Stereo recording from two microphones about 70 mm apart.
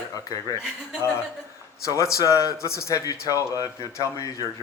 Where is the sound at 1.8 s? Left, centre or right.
Left.